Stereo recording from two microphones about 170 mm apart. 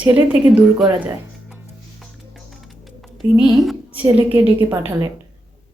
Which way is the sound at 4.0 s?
10° right (ahead or behind).